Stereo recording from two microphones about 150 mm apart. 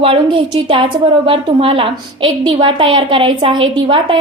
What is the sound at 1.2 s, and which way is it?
A woman's voice, 35° right (ahead or behind).